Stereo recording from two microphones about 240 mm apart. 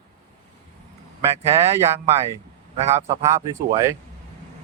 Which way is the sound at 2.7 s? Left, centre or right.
Right.